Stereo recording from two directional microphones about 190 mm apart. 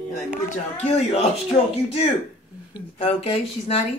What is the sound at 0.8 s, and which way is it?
Speech, 35° left (ahead or behind).